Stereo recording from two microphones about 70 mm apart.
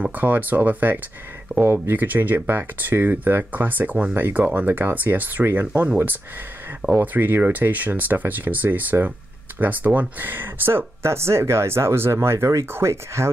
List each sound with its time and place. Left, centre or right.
0.0 s speech: right
7.0 s speech: right